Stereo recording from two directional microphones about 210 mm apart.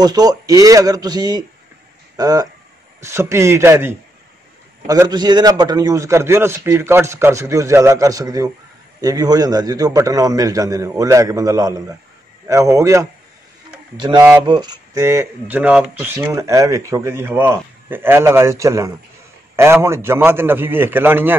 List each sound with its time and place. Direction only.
0.0 s speech: 20° right (ahead or behind)